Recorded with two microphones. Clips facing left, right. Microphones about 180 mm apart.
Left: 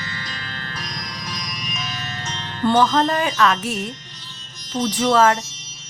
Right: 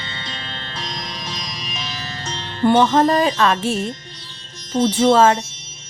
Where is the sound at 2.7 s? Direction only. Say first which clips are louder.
Right 3 dB; 25° right (ahead or behind).